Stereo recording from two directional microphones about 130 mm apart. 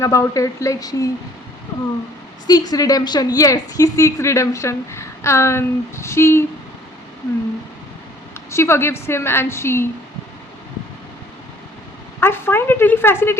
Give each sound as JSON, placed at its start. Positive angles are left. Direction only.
{"t": 0.0, "sound": "a woman's voice", "side_deg": 25}
{"t": 2.5, "sound": "a woman's voice", "side_deg": 30}
{"t": 8.4, "sound": "a woman's voice", "side_deg": 20}
{"t": 12.2, "sound": "speech", "side_deg": 20}